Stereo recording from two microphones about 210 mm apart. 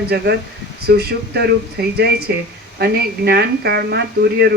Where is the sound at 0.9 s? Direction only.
50° right (ahead or behind).